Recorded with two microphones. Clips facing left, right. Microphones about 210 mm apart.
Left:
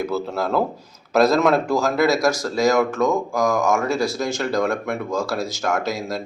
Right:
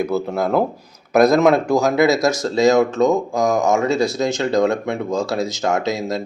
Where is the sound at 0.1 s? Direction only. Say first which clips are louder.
Right 3 dB; 20° right (ahead or behind).